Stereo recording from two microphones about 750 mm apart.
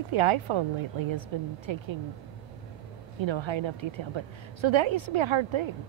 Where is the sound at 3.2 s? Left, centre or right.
Right.